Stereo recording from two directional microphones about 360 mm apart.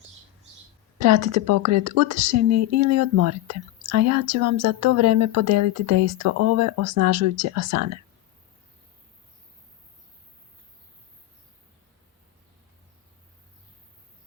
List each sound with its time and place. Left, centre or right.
0.9 s a woman's voice: right